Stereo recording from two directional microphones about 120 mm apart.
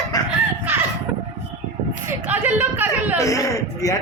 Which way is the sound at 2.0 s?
15° right (ahead or behind).